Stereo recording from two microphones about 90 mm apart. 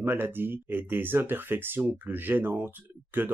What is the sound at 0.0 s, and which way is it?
Speech, 25° right (ahead or behind).